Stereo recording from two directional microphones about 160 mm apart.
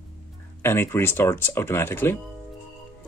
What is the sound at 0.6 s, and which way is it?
Speech, 15° left (ahead or behind).